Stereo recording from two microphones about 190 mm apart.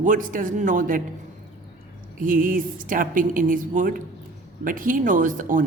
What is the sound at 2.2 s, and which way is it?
Speech, 45° right (ahead or behind).